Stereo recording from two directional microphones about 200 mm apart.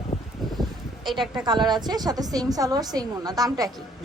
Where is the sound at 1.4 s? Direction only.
20° right (ahead or behind).